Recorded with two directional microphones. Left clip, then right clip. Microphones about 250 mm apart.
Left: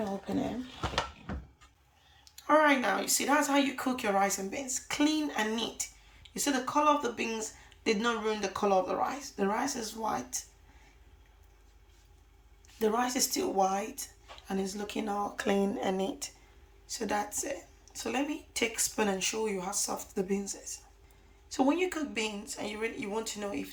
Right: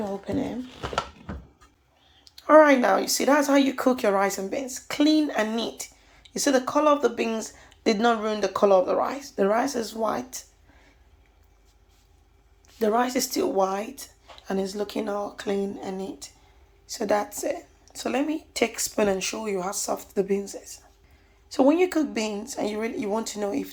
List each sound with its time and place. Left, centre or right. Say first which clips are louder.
0.3 s speech: right 6 dB; centre
2.2 s speech: right 9 dB; centre
12.8 s speech: right 6 dB; centre
16.9 s speech: right 8 dB; centre